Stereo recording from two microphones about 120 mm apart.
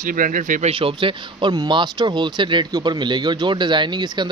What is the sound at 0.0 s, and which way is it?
Speech, 90° right.